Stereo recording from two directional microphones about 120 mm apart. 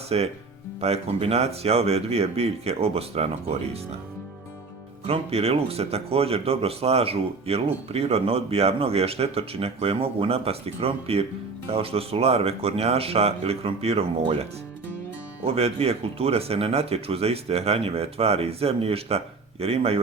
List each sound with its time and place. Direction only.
0.1 s speech: 55° right (ahead or behind)
5.0 s speech: 60° right (ahead or behind)
15.4 s speech: 55° right (ahead or behind)